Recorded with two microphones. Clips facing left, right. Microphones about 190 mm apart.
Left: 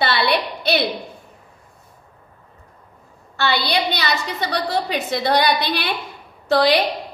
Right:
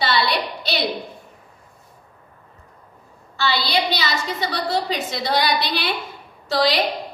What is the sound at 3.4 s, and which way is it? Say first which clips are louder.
A woman's voice: left 1 dB; 60° left (ahead or behind).